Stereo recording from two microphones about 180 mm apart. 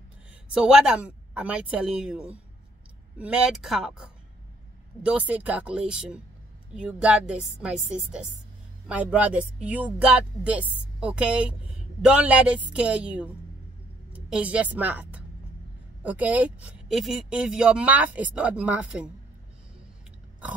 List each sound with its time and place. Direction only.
0.5 s a woman's voice: 5° right (ahead or behind)